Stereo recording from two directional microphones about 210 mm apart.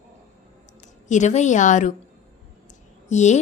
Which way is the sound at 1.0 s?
35° left (ahead or behind).